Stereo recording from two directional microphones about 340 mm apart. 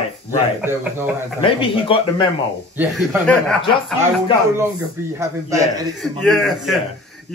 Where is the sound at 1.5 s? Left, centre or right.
Centre.